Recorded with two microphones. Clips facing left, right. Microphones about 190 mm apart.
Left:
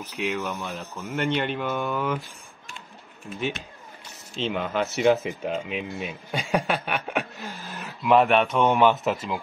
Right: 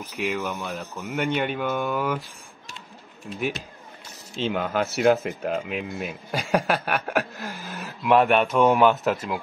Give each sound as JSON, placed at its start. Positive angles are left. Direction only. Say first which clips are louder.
{"t": 0.3, "sound": "speech", "louder": "right 2 dB", "side_deg": 0}
{"t": 3.3, "sound": "speech", "louder": "right 1 dB", "side_deg": -5}